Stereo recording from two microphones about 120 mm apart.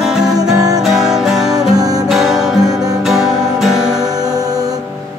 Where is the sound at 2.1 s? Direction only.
5° right (ahead or behind).